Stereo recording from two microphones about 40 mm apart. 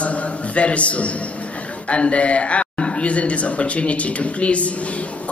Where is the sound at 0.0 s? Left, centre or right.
Left.